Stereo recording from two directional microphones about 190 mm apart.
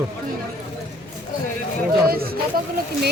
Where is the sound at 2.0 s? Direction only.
50° right (ahead or behind).